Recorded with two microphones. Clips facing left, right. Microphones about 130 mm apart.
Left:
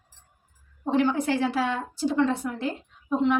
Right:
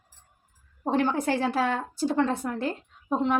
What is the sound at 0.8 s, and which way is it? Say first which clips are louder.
Speech: left 1 dB; 45° right (ahead or behind).